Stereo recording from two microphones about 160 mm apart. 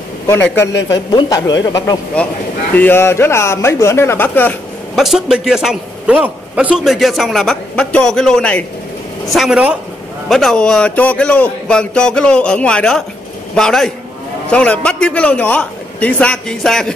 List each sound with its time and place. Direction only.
0.3 s a man's voice: 15° left (ahead or behind)
2.2 s a man's voice: 10° left (ahead or behind)
4.9 s a man's voice: centre (ahead or behind)